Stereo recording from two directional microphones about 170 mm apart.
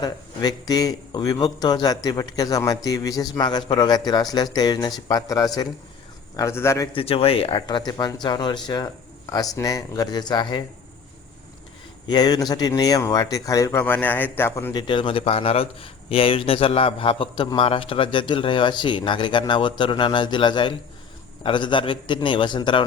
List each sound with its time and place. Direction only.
0.0 s a man's voice: 20° left (ahead or behind)
6.9 s a man's voice: 35° left (ahead or behind)
12.0 s a man's voice: 25° left (ahead or behind)
14.7 s a man's voice: 25° left (ahead or behind)